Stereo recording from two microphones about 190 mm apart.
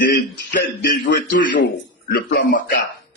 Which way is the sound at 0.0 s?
60° left (ahead or behind).